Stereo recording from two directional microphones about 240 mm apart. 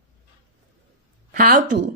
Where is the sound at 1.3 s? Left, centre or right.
Right.